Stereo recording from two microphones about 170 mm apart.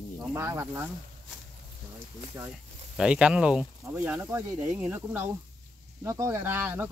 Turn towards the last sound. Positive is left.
turn(degrees=-10)  # may be behind; listen again after turning